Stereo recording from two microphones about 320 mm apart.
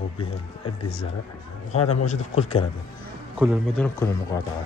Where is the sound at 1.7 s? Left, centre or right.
Centre.